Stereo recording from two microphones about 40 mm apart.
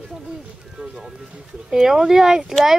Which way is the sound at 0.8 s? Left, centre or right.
Centre.